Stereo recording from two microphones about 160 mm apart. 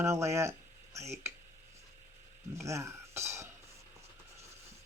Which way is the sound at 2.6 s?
20° right (ahead or behind).